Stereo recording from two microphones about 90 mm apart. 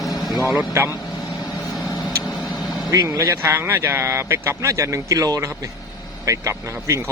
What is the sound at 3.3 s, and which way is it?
Speech, 25° right (ahead or behind).